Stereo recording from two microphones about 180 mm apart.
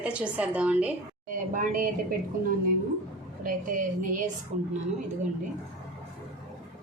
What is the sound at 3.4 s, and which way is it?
Speech, 50° right (ahead or behind).